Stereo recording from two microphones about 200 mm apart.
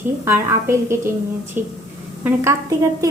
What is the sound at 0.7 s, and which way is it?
A woman's voice, 15° right (ahead or behind).